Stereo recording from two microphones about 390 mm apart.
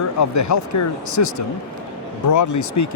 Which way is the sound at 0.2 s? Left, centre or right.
Left.